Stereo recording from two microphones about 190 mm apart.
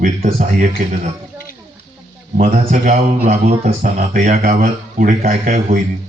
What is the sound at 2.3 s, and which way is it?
A man's voice, 40° right (ahead or behind).